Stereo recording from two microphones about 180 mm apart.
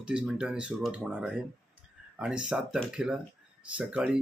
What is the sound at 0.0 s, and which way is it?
Speech, 5° right (ahead or behind).